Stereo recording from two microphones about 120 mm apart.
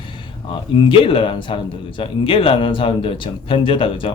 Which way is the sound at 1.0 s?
45° left (ahead or behind).